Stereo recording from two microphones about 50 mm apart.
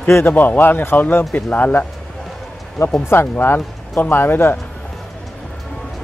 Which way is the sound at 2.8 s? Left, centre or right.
Left.